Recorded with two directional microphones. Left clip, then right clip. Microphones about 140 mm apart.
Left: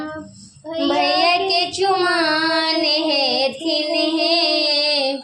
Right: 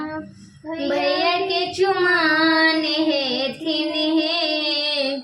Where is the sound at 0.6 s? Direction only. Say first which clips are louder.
Left 3 dB; 35° left (ahead or behind).